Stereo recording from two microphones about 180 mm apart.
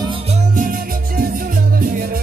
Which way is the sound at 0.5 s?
50° right (ahead or behind).